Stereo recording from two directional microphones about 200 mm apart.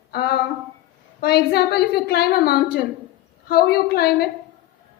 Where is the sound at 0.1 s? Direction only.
50° left (ahead or behind).